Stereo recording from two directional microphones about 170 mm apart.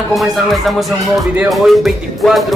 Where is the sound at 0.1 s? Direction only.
Centre (ahead or behind).